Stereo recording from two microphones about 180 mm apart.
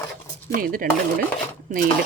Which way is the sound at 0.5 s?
50° right (ahead or behind).